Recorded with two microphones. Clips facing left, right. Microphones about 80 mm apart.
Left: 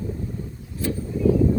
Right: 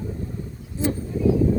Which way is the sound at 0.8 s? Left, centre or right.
Right.